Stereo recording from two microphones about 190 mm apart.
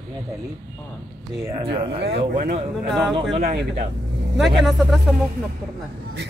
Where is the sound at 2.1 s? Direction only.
35° right (ahead or behind).